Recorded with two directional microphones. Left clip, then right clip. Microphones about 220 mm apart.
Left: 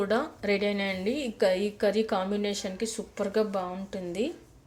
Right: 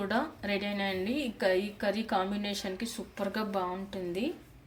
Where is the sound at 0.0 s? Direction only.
15° left (ahead or behind).